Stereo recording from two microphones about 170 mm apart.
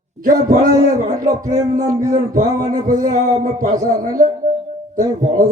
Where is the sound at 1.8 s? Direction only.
20° right (ahead or behind).